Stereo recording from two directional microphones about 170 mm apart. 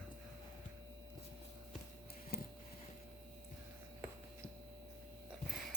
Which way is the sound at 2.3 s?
65° left (ahead or behind).